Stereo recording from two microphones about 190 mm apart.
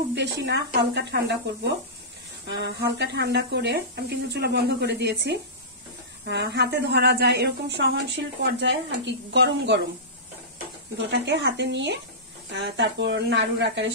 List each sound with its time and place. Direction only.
0.1 s a woman's voice: 65° right (ahead or behind)
11.0 s speech: 65° right (ahead or behind)